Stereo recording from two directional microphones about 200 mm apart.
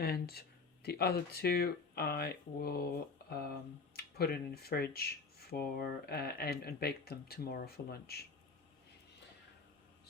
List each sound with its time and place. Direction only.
0.0 s speech: 50° left (ahead or behind)